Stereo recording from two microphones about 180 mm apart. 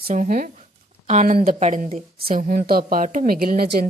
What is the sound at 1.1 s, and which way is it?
A woman's voice, 40° right (ahead or behind).